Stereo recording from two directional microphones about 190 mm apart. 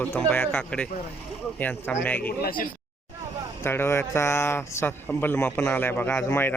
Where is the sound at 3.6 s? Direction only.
10° left (ahead or behind).